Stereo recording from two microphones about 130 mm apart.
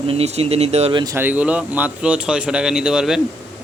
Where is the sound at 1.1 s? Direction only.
15° right (ahead or behind).